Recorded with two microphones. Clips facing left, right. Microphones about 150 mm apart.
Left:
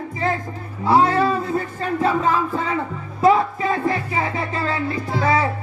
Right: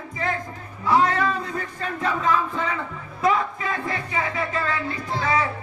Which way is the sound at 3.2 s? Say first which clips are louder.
Left 6 dB; 30° left (ahead or behind).